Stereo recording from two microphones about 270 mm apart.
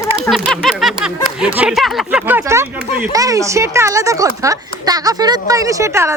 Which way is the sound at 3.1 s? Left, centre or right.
Centre.